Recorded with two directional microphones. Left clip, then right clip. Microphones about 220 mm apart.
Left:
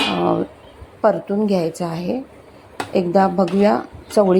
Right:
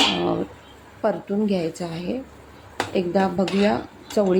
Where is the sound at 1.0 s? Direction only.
15° left (ahead or behind).